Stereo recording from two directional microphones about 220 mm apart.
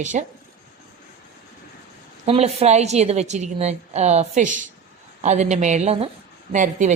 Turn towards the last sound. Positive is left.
turn(degrees=-35)  # may be behind; listen again after turning